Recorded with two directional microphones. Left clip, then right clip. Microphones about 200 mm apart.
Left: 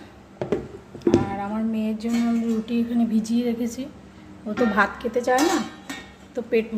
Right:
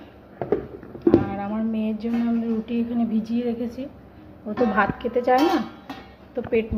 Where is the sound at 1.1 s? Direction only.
10° right (ahead or behind).